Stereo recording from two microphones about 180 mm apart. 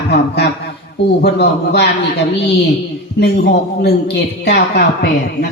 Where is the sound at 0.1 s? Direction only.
65° left (ahead or behind).